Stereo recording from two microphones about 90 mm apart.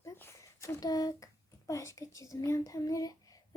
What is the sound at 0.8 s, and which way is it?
A child's voice, 45° left (ahead or behind).